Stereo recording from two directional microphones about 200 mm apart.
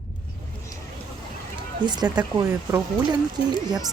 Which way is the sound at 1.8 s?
20° right (ahead or behind).